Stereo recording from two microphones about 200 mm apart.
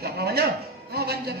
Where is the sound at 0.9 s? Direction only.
55° right (ahead or behind).